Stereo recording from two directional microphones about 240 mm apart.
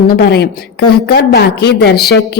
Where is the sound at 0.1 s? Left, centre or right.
Left.